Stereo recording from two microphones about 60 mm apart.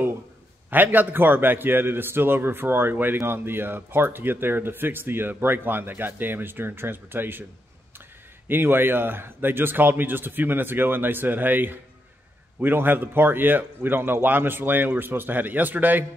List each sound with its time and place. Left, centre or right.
0.7 s speech: right
8.5 s speech: right